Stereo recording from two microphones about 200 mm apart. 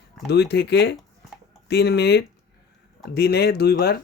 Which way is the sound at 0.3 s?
55° left (ahead or behind).